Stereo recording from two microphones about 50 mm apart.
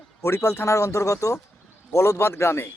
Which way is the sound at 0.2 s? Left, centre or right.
Left.